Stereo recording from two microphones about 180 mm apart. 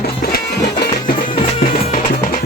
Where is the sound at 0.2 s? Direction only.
60° left (ahead or behind).